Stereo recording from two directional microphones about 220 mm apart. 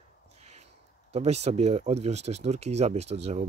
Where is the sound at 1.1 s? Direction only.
30° right (ahead or behind).